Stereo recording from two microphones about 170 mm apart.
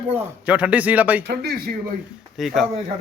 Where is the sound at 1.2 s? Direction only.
70° right (ahead or behind).